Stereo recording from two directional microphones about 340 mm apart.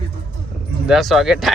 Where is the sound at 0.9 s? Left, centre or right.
Centre.